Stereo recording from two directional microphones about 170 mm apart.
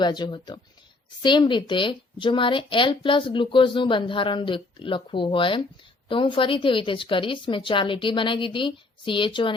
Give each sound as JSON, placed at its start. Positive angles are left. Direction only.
{"t": 0.0, "sound": "a woman's voice", "side_deg": 25}